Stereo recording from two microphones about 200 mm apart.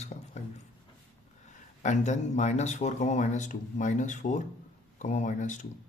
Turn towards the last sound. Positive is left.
turn(degrees=40)  # may be behind; listen again after turning